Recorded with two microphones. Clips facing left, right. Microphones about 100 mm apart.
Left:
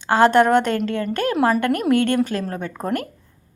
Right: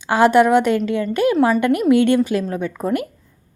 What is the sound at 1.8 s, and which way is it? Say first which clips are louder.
Speech: right 4 dB; 45° left (ahead or behind).